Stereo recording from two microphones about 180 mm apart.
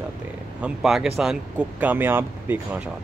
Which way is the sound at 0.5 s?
5° right (ahead or behind).